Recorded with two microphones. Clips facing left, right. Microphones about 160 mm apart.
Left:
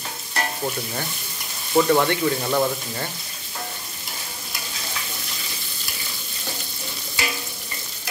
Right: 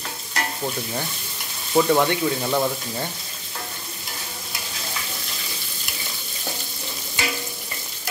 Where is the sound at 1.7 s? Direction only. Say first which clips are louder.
Even; 5° right (ahead or behind).